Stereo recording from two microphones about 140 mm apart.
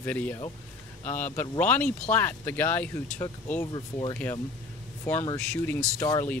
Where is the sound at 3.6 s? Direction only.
30° left (ahead or behind).